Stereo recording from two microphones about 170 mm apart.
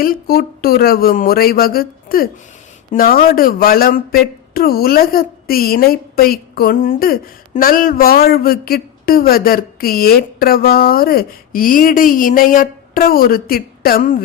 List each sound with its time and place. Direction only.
0.0 s speech: 60° left (ahead or behind)